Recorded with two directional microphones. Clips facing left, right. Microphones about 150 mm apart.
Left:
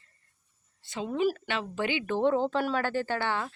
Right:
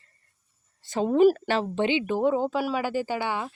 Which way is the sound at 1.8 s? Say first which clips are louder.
Right 3 dB; 20° right (ahead or behind).